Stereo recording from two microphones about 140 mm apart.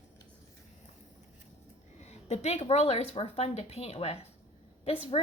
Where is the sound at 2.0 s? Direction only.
50° left (ahead or behind).